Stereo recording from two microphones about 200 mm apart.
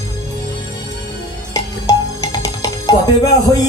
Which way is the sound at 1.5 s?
20° left (ahead or behind).